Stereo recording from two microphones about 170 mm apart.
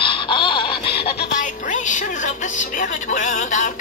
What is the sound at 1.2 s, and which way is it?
Music, 50° left (ahead or behind).